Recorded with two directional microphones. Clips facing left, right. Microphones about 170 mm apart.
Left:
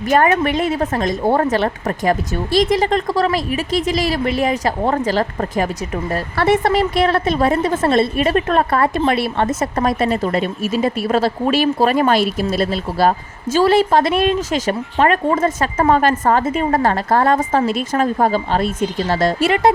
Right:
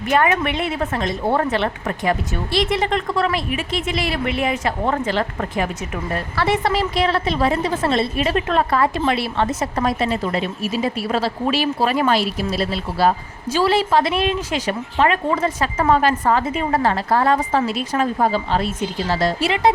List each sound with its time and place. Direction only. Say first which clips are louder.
0.1 s a woman's voice: left 3 dB; 40° left (ahead or behind)
6.3 s a woman's voice: left 5 dB; 50° left (ahead or behind)